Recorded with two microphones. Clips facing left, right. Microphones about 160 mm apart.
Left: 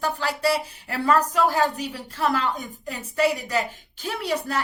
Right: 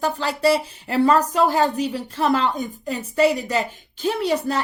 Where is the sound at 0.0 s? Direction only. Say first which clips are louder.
Right 4 dB; 25° right (ahead or behind).